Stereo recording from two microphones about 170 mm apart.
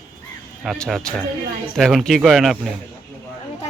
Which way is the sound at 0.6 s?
Centre (ahead or behind).